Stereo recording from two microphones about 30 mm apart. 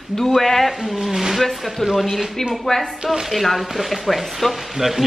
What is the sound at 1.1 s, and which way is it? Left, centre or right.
Speech, centre.